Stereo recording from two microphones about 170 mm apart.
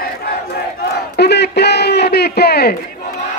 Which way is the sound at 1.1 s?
75° left (ahead or behind).